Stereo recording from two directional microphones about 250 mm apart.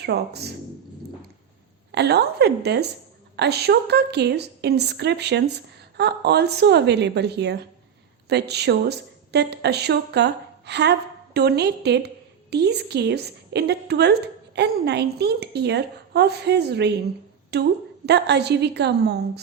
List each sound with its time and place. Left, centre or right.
0.0 s a woman's voice: right
1.9 s a woman's voice: right